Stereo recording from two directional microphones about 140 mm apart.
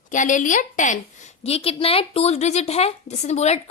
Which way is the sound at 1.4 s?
45° left (ahead or behind).